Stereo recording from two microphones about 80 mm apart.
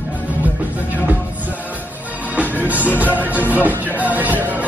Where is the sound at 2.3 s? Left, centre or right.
Centre.